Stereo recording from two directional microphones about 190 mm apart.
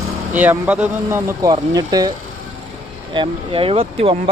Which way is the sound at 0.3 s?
10° right (ahead or behind).